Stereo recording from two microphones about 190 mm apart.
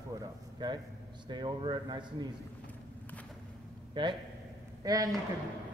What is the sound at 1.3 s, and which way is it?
Speech, 25° right (ahead or behind).